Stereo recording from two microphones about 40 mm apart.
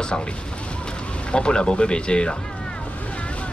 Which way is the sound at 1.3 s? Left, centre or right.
Left.